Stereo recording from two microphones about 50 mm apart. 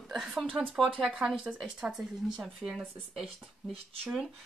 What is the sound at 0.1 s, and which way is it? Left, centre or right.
Speech, centre.